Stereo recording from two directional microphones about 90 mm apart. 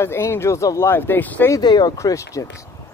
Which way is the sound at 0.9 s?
25° left (ahead or behind).